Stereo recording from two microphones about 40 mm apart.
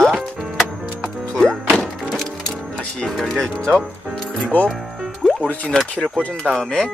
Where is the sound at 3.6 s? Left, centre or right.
Left.